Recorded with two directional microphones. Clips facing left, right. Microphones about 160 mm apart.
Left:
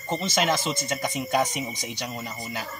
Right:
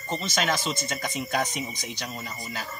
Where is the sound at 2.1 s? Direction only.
15° left (ahead or behind).